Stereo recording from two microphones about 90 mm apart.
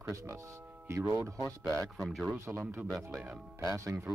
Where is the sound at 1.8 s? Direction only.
Centre (ahead or behind).